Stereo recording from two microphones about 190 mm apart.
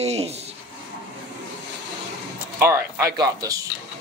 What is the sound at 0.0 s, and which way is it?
Speech, 35° right (ahead or behind).